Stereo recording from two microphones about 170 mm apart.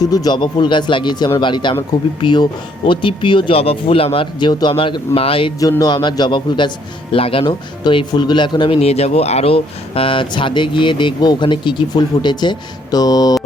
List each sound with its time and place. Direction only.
0.0 s speech: 20° left (ahead or behind)
5.5 s speech: 20° left (ahead or behind)